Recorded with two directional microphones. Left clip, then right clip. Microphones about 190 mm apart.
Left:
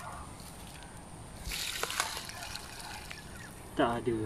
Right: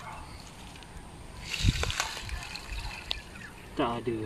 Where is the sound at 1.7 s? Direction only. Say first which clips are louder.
Right 1 dB; 5° left (ahead or behind).